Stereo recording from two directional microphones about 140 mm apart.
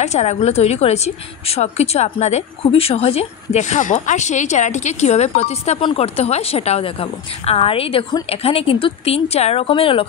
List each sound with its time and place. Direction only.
0.0 s a woman's voice: 55° left (ahead or behind)